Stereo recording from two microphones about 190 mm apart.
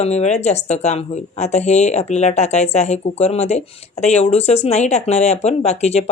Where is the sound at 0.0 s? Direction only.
35° left (ahead or behind).